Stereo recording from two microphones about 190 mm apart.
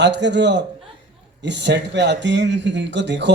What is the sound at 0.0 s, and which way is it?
A woman's voice, 65° right (ahead or behind).